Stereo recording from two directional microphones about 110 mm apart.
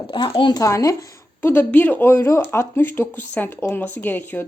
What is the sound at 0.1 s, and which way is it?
Speech, 45° left (ahead or behind).